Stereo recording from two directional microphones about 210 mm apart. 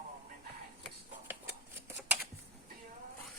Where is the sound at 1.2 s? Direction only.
10° right (ahead or behind).